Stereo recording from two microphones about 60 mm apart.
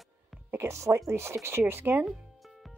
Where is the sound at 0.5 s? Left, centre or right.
Right.